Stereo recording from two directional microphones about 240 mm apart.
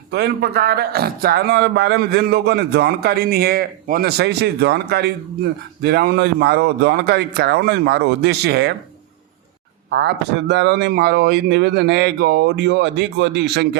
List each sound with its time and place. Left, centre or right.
0.1 s speech: right
9.9 s speech: right